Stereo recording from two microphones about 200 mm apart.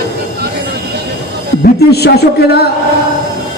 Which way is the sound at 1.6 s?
55° left (ahead or behind).